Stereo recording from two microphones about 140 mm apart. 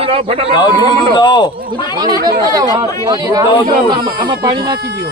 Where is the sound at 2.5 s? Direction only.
25° right (ahead or behind).